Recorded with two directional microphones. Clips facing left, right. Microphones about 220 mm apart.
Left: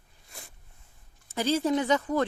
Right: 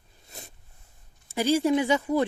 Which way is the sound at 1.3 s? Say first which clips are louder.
Right 3 dB; 10° right (ahead or behind).